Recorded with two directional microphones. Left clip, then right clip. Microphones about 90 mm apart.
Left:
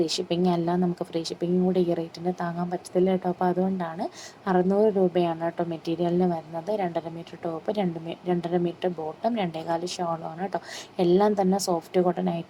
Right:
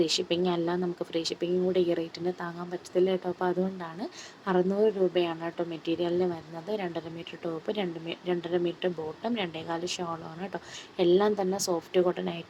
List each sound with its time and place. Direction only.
0.0 s a woman's voice: 25° left (ahead or behind)